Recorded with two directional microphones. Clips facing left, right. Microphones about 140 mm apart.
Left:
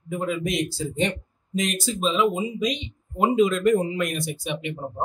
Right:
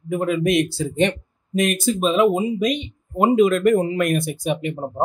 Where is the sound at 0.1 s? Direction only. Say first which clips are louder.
Right 7 dB; 60° right (ahead or behind).